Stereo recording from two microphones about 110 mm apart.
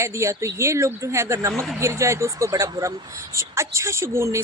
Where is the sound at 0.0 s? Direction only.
25° right (ahead or behind).